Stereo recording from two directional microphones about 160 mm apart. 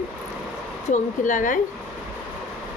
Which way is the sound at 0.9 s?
50° left (ahead or behind).